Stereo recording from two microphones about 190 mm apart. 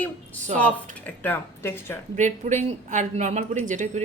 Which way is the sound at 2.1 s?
40° right (ahead or behind).